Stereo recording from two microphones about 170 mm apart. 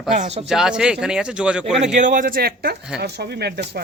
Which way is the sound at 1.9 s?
50° right (ahead or behind).